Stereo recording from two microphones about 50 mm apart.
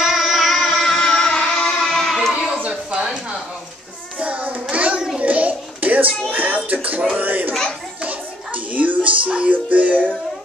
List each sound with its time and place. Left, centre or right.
0.0 s music: centre
0.6 s music: centre
0.8 s music: left
2.3 s a sound: centre
4.2 s child singing: right
5.2 s a sound: right
6.3 s music: right
7.2 s a sound: right
8.0 s music: right